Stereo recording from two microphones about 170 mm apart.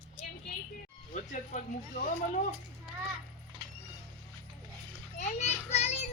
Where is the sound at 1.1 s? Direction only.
45° left (ahead or behind).